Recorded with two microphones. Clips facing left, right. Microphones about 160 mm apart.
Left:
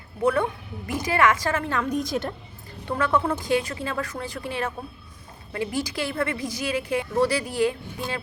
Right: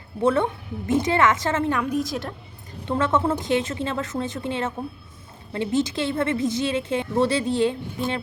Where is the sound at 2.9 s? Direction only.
25° right (ahead or behind).